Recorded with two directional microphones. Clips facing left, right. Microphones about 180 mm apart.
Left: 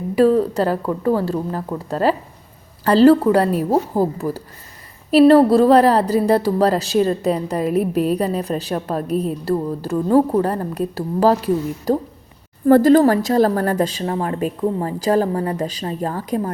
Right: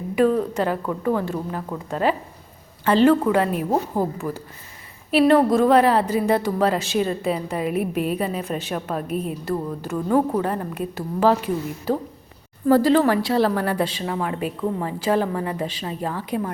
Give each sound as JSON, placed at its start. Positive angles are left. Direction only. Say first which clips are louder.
{"t": 0.2, "sound": "a woman's voice", "louder": "left 4 dB", "side_deg": 35}
{"t": 5.1, "sound": "a woman's voice", "louder": "left 5 dB", "side_deg": 35}
{"t": 12.6, "sound": "a woman's voice", "louder": "left 5 dB", "side_deg": 50}